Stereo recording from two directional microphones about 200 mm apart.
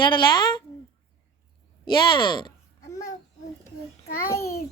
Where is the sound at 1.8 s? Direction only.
25° left (ahead or behind).